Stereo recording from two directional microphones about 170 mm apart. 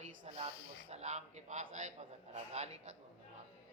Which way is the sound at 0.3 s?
40° right (ahead or behind).